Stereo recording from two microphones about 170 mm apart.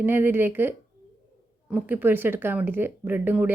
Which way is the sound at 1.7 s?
10° right (ahead or behind).